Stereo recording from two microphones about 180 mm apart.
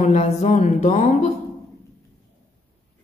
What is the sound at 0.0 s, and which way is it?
A woman's voice, 40° left (ahead or behind).